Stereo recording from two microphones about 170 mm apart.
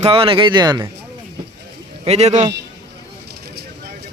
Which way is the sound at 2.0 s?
40° right (ahead or behind).